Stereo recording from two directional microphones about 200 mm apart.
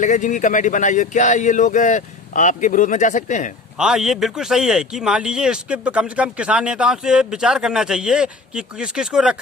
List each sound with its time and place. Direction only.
0.0 s speech: 40° left (ahead or behind)
3.8 s a man's voice: 5° right (ahead or behind)